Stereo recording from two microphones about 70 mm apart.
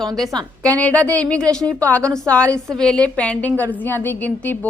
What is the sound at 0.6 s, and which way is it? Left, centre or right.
Speech, left.